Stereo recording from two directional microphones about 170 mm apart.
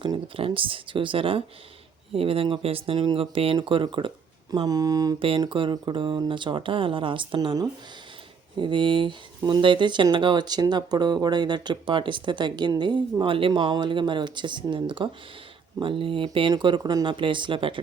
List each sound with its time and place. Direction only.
0.0 s speech: 30° right (ahead or behind)